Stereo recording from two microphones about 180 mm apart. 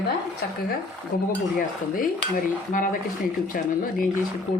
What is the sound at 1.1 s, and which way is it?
Speech, 50° left (ahead or behind).